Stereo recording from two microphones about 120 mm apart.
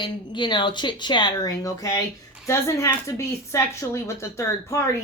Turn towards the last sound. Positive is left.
turn(degrees=25)  # may be behind; listen again after turning